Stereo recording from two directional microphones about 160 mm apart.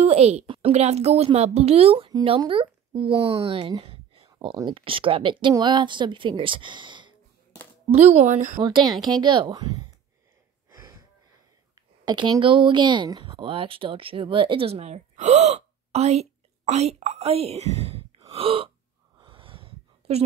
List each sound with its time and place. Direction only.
0.0 s a woman's voice: 40° right (ahead or behind)
7.9 s speech: 45° right (ahead or behind)
8.5 s a woman's voice: 25° right (ahead or behind)
10.7 s a sound: 25° right (ahead or behind)
12.0 s speech: 25° right (ahead or behind)
19.1 s a sound: 35° right (ahead or behind)